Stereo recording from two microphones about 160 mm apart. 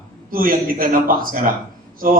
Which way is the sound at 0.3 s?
65° right (ahead or behind).